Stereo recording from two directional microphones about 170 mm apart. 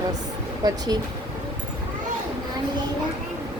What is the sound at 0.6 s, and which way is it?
Speech, 20° right (ahead or behind).